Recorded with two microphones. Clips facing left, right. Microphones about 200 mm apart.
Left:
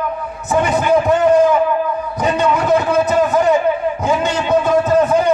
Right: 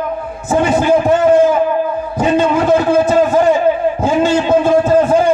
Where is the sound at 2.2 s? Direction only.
25° right (ahead or behind).